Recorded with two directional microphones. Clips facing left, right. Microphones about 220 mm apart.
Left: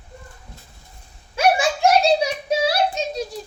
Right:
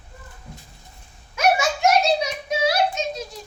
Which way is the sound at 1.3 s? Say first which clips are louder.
Left 2 dB; 30° left (ahead or behind).